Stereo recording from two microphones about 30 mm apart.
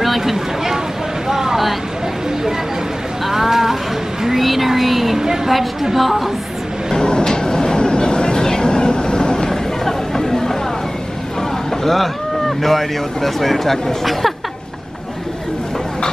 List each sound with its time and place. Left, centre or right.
0.2 s a sound: centre
3.3 s a sound: centre
4.2 s speech: centre
5.2 s a woman's voice: centre
5.5 s speech: centre
7.0 s vehicle: left
9.5 s chatter: centre
11.8 s speech: centre